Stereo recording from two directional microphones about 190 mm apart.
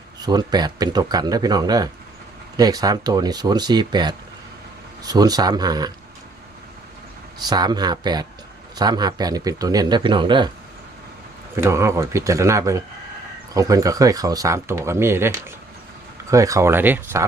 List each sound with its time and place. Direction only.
0.2 s speech: 20° right (ahead or behind)
7.4 s speech: 20° right (ahead or behind)
11.5 s speech: 15° right (ahead or behind)